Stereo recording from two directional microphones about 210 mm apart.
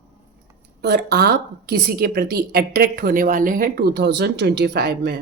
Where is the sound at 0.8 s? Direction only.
50° right (ahead or behind).